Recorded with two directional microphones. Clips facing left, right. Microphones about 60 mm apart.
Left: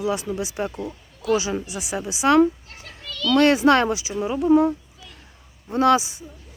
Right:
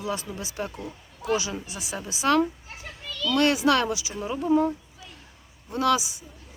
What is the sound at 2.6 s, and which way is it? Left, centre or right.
Children playing, centre.